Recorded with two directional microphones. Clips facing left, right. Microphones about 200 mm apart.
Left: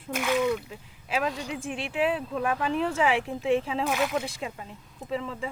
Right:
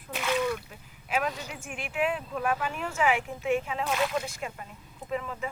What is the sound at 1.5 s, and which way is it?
Speech, 30° left (ahead or behind).